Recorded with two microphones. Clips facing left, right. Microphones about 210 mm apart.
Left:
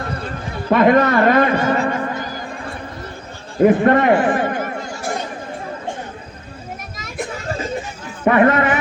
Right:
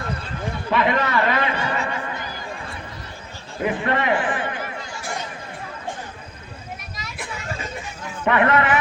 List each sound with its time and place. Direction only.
0.7 s a man's voice: 45° left (ahead or behind)
7.0 s children playing: 45° left (ahead or behind)
8.2 s a man's voice: 35° left (ahead or behind)